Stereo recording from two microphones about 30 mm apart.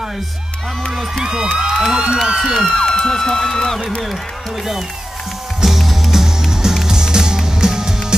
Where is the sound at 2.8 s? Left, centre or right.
Centre.